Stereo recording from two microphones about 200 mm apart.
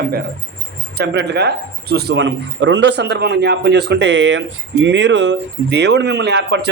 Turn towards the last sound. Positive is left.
turn(degrees=-55)  # may be behind; listen again after turning